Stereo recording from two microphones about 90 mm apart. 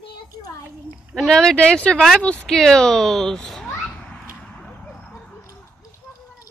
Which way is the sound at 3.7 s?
15° left (ahead or behind).